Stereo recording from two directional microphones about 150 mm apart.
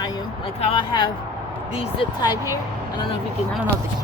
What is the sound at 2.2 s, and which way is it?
Speech, 25° left (ahead or behind).